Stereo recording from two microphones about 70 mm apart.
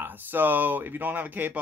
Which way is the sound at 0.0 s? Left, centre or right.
Right.